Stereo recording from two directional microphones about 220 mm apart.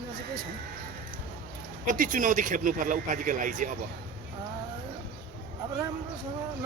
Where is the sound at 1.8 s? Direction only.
35° right (ahead or behind).